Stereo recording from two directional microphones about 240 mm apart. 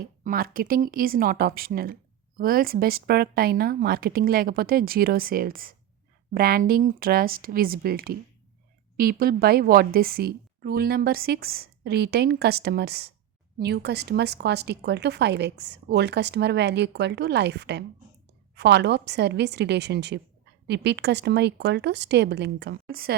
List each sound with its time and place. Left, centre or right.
0.0 s a woman's voice: right